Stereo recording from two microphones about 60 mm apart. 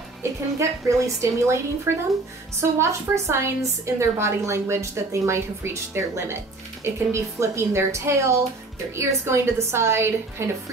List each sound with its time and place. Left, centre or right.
0.2 s a woman's voice: right
1.9 s speech: right
2.8 s a woman's voice: right